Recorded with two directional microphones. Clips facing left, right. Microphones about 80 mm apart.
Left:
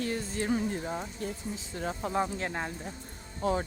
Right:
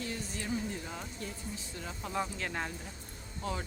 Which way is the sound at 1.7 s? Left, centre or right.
Left.